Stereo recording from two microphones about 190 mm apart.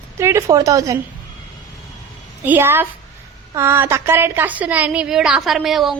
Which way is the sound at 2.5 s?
10° right (ahead or behind).